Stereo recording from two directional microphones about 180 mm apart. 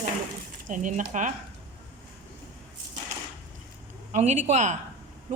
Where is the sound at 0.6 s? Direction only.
45° right (ahead or behind).